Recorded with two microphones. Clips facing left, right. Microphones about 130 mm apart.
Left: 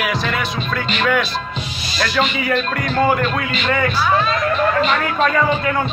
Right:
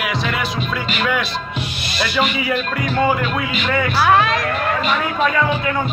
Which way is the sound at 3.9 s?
70° right (ahead or behind).